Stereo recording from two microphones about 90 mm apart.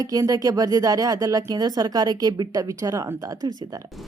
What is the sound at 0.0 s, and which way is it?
Speech, 40° right (ahead or behind).